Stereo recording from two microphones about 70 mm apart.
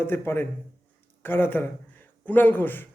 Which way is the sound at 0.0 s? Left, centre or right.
Left.